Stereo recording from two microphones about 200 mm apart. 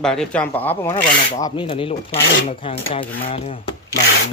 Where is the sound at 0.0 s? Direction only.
5° left (ahead or behind).